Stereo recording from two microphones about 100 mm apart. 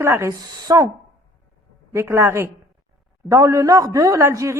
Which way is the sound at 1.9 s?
25° right (ahead or behind).